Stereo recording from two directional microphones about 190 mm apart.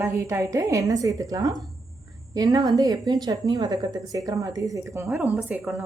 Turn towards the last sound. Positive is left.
turn(degrees=-5)  # may be behind; listen again after turning